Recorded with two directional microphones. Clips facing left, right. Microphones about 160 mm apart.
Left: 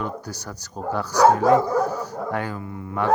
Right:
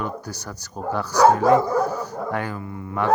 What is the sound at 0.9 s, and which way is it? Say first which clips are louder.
Speech: even; 15° left (ahead or behind).